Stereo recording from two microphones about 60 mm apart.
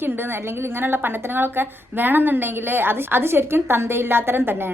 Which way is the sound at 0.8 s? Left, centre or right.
Right.